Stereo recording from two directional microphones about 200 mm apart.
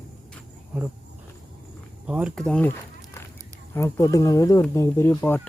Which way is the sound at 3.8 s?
15° left (ahead or behind).